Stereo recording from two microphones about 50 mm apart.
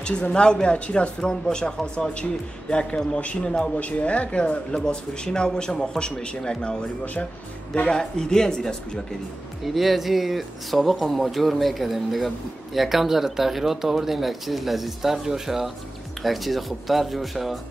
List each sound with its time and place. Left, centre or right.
0.0 s speech: centre
1.3 s speech: centre
9.8 s speech: centre